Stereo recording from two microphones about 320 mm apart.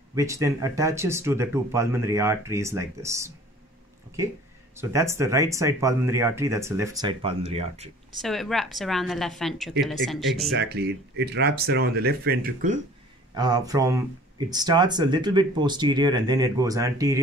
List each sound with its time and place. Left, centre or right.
0.1 s speech: centre
4.7 s speech: centre
8.2 s a woman's voice: centre
10.5 s speech: right
13.4 s speech: centre